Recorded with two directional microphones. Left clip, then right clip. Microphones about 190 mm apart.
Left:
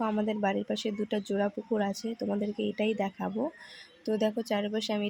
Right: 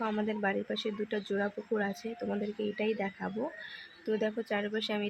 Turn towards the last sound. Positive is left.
turn(degrees=20)  # may be behind; listen again after turning